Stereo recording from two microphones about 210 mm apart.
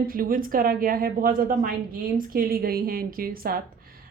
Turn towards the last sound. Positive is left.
turn(degrees=-45)  # may be behind; listen again after turning